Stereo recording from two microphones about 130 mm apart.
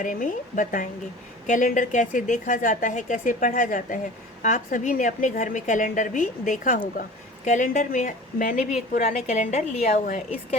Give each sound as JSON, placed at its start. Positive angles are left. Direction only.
{"t": 0.0, "sound": "a woman's voice", "side_deg": 90}
{"t": 7.4, "sound": "a woman's voice", "side_deg": 75}